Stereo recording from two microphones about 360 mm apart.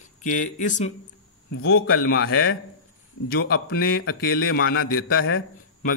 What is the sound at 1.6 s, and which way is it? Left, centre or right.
A man's voice, left.